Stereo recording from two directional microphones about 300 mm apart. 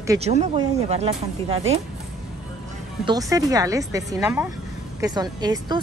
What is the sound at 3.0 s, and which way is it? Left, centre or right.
Speech, centre.